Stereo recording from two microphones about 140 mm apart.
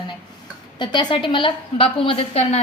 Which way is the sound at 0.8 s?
35° left (ahead or behind).